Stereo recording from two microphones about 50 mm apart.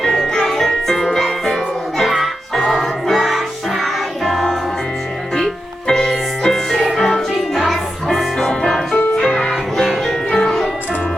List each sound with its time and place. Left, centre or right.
0.0 s music: centre
5.9 s music: centre
8.4 s music: centre